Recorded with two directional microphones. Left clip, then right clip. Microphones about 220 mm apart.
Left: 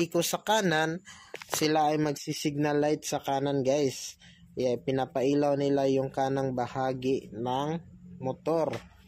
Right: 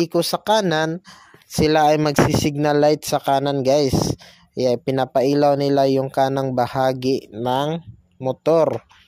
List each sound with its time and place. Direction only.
0.0 s speech: 35° right (ahead or behind)
1.6 s speech: 45° right (ahead or behind)